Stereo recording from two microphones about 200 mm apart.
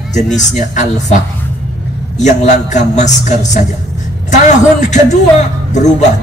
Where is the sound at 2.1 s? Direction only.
35° left (ahead or behind).